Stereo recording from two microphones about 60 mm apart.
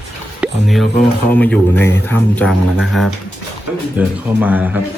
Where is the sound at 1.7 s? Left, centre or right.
Left.